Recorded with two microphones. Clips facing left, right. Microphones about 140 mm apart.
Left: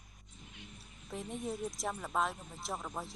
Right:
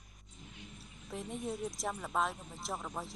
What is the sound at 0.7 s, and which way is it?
A woman's voice, centre (ahead or behind).